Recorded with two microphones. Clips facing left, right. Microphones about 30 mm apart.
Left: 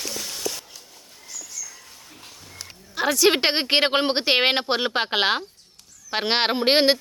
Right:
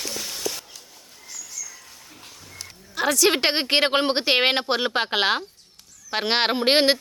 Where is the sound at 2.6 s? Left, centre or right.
Centre.